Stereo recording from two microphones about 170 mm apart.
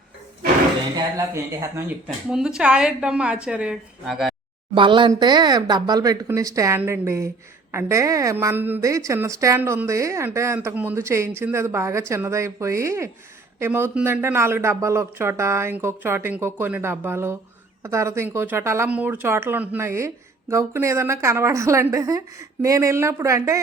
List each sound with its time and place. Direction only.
0.9 s speech: 15° right (ahead or behind)
2.3 s a woman's voice: 5° right (ahead or behind)
4.7 s speech: 30° right (ahead or behind)